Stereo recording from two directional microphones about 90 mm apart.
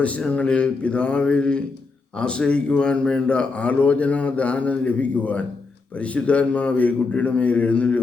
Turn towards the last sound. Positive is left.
turn(degrees=15)  # may be behind; listen again after turning